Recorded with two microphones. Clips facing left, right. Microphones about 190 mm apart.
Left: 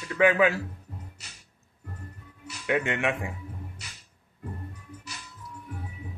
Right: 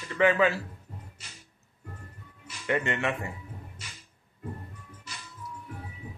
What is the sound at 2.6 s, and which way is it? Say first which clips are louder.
Speech: left 2 dB; 10° left (ahead or behind).